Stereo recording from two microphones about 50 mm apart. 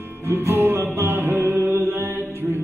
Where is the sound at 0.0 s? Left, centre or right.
Right.